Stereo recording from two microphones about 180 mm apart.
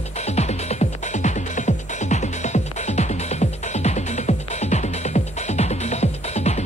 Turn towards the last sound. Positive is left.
turn(degrees=40)  # may be behind; listen again after turning